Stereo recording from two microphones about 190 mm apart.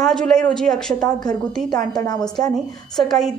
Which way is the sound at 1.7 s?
20° left (ahead or behind).